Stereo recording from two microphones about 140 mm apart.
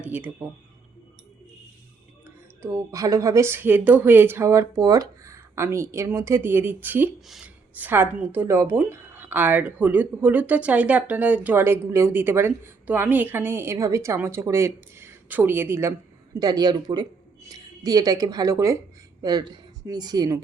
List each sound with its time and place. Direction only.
0.0 s speech: 10° right (ahead or behind)
2.6 s speech: 20° right (ahead or behind)
16.4 s speech: 30° right (ahead or behind)